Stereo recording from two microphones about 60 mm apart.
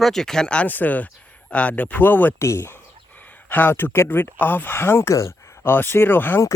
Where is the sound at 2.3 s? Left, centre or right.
Left.